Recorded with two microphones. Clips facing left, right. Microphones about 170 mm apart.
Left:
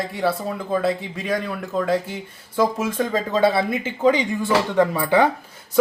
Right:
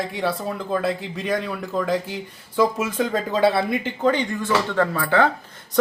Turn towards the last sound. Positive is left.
turn(degrees=15)  # may be behind; listen again after turning